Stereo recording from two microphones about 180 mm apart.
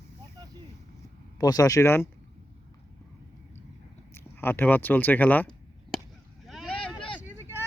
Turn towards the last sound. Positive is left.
turn(degrees=-15)  # may be behind; listen again after turning